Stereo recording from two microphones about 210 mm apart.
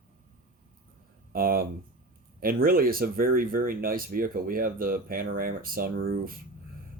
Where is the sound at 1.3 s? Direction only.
45° right (ahead or behind).